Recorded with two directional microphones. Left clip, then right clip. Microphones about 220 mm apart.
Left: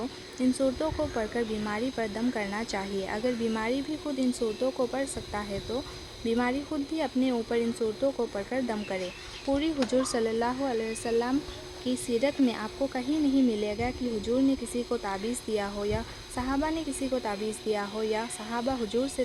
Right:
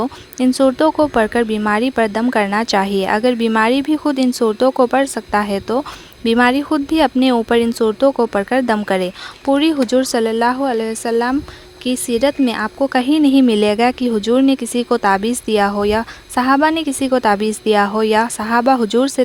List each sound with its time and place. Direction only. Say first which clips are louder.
0.0 s speech: right 12 dB; 40° right (ahead or behind)